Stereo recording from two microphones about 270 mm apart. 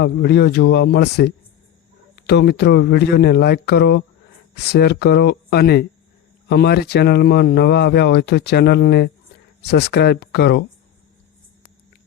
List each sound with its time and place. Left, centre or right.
0.0 s speech: left